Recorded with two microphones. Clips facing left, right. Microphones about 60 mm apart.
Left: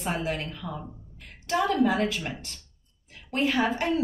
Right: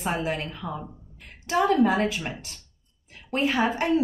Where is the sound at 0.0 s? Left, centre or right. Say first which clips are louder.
Right 2 dB; centre.